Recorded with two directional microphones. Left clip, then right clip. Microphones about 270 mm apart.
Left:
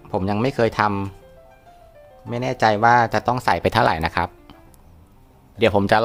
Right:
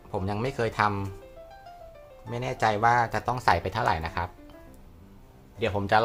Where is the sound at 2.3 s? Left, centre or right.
Left.